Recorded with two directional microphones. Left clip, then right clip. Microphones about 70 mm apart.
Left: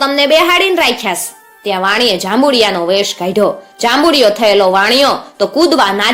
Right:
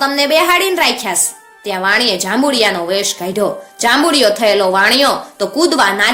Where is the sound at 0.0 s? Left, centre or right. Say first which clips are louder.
Left 3 dB; left.